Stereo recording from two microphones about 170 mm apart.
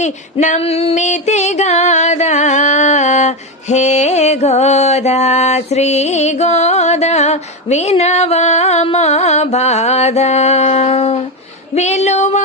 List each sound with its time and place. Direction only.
0.0 s female singing: 45° left (ahead or behind)
11.7 s speech: 40° left (ahead or behind)